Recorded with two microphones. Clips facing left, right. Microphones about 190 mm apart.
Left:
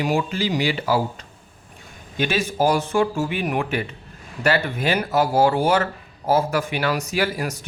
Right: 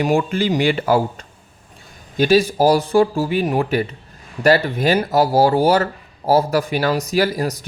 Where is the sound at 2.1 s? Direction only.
35° right (ahead or behind).